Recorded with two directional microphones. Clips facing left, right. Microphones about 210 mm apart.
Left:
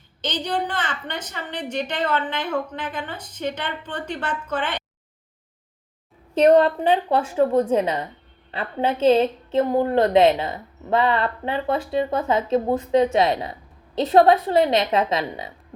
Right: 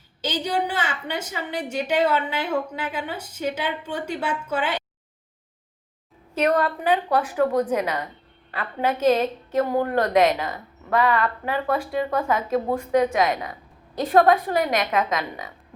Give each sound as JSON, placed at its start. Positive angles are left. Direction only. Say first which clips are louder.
{"t": 0.2, "sound": "a woman's voice", "louder": "right 1 dB", "side_deg": -10}
{"t": 6.3, "sound": "a woman's voice", "louder": "left 7 dB", "side_deg": 30}